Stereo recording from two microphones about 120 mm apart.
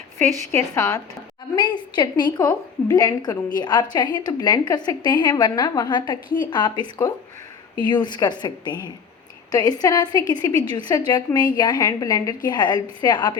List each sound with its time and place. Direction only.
0.5 s a woman's voice: 30° left (ahead or behind)